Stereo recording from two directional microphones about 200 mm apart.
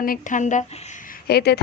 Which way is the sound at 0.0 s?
40° left (ahead or behind).